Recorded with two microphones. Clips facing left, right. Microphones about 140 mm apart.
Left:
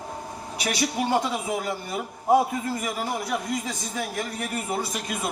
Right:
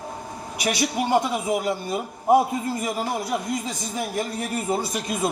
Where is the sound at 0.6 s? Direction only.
15° right (ahead or behind).